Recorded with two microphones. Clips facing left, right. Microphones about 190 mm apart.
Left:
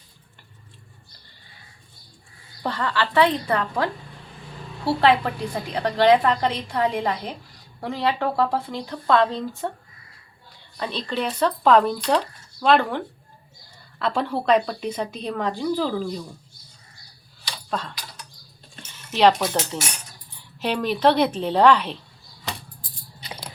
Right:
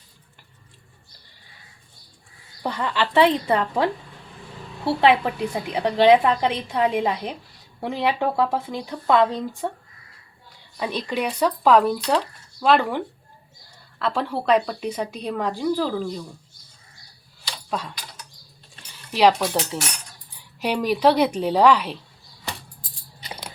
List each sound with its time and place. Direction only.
2.6 s a woman's voice: 15° right (ahead or behind)
4.9 s a woman's voice: 15° right (ahead or behind)
14.0 s a woman's voice: 5° right (ahead or behind)
17.7 s a sound: 10° right (ahead or behind)
19.1 s a woman's voice: 10° right (ahead or behind)